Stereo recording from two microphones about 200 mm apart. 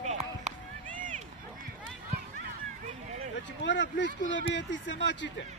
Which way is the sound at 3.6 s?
60° left (ahead or behind).